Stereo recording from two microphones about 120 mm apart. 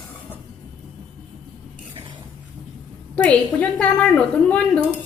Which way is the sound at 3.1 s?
10° left (ahead or behind).